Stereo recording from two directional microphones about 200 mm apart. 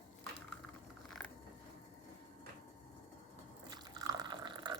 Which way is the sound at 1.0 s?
Centre (ahead or behind).